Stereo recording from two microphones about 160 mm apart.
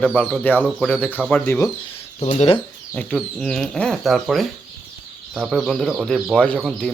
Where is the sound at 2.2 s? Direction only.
40° left (ahead or behind).